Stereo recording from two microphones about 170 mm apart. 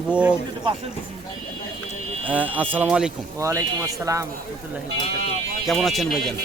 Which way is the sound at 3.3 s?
20° right (ahead or behind).